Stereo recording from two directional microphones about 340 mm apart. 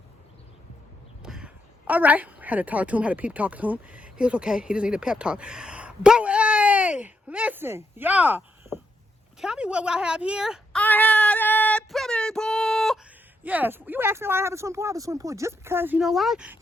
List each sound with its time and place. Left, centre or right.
1.2 s crow: centre
1.9 s a woman's voice: centre